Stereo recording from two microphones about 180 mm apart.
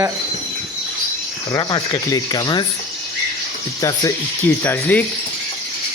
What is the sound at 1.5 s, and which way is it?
Speech, 20° left (ahead or behind).